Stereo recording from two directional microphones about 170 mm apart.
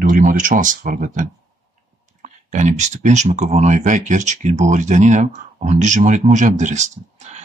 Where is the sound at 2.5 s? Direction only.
45° right (ahead or behind).